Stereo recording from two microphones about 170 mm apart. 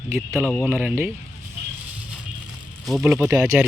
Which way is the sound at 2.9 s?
Centre (ahead or behind).